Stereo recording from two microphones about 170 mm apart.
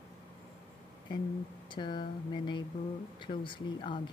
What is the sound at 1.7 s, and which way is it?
Speech, 25° left (ahead or behind).